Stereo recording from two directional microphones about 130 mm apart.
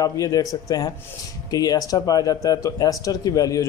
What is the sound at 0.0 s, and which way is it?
A man's voice, 25° left (ahead or behind).